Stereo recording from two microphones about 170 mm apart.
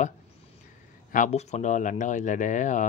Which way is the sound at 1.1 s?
45° left (ahead or behind).